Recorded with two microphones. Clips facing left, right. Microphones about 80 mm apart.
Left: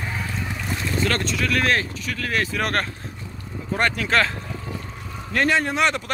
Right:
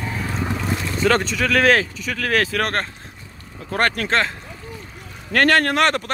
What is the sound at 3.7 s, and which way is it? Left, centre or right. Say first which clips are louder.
Speech: right 2 dB; right.